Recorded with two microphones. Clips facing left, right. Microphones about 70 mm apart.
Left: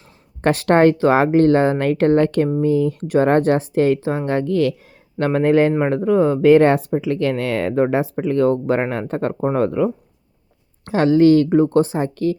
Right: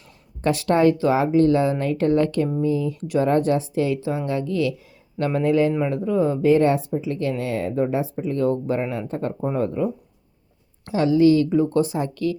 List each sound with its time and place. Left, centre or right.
0.4 s speech: left
10.8 s speech: left